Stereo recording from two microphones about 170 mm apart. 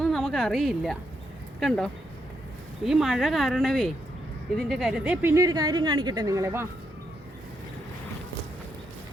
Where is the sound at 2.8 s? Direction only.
Centre (ahead or behind); by 6.6 s 15° right (ahead or behind).